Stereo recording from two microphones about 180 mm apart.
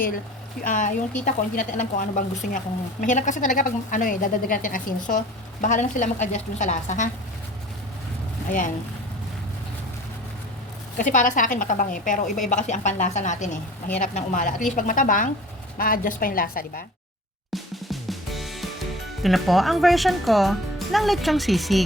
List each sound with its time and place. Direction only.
0.6 s a woman's voice: 45° left (ahead or behind)
8.4 s a woman's voice: 45° left (ahead or behind)
10.9 s a woman's voice: 45° left (ahead or behind)
17.5 s drum: centre (ahead or behind)
19.2 s speech: centre (ahead or behind)